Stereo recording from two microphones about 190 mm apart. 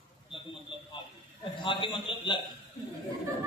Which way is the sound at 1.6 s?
25° left (ahead or behind).